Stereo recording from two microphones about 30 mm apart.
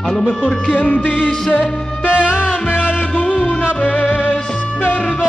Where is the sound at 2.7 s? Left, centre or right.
Left.